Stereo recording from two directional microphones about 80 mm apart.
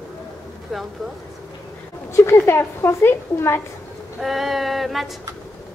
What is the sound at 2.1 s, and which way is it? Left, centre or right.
A woman's voice, left.